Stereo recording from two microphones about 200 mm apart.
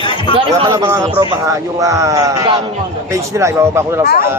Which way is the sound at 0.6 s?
20° right (ahead or behind).